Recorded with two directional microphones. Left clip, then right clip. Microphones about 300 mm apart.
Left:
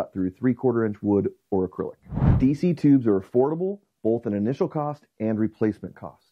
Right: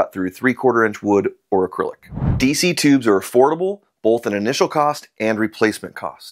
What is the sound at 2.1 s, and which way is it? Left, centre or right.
Speech, centre.